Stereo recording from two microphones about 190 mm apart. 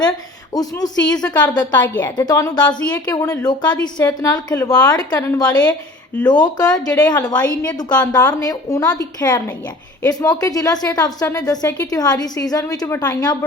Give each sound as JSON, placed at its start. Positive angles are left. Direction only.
{"t": 0.5, "sound": "a woman's voice", "side_deg": 20}